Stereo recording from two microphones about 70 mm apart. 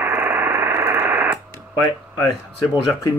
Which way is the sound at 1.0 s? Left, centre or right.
Right.